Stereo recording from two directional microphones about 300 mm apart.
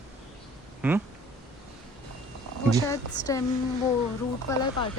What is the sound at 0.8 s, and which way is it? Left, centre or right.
Speech, centre.